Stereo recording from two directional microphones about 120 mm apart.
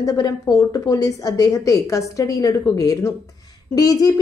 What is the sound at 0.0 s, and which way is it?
A woman's voice, 30° left (ahead or behind).